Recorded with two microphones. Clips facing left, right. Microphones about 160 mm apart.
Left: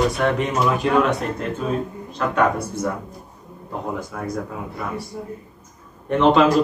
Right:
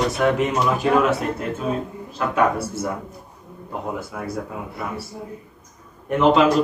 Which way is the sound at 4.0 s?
5° right (ahead or behind).